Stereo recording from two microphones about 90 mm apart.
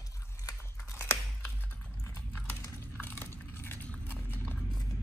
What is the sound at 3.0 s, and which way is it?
Horse, 25° left (ahead or behind).